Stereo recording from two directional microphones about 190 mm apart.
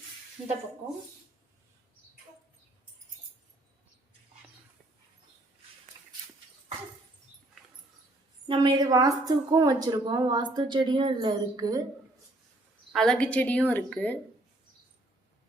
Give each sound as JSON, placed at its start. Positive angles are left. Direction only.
{"t": 8.4, "sound": "a woman's voice", "side_deg": -20}
{"t": 12.9, "sound": "speech", "side_deg": 5}